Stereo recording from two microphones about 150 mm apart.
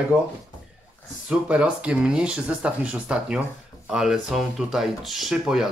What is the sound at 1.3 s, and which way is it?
Speech, 10° right (ahead or behind).